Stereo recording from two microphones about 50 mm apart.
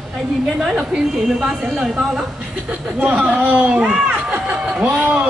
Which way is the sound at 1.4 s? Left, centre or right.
Centre.